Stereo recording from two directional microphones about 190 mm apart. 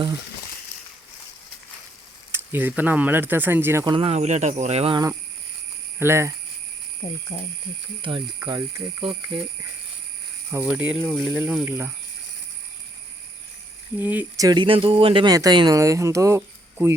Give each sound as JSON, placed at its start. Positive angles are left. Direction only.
{"t": 2.3, "sound": "speech", "side_deg": -10}
{"t": 3.9, "sound": "speech", "side_deg": -35}
{"t": 6.0, "sound": "speech", "side_deg": -15}
{"t": 7.0, "sound": "speech", "side_deg": 20}
{"t": 8.0, "sound": "speech", "side_deg": -25}
{"t": 10.5, "sound": "speech", "side_deg": -10}
{"t": 14.0, "sound": "speech", "side_deg": -10}